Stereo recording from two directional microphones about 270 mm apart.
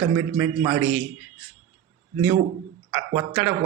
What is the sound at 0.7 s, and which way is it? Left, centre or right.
Speech, right.